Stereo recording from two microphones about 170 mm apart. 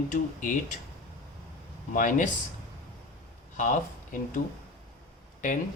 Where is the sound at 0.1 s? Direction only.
50° left (ahead or behind).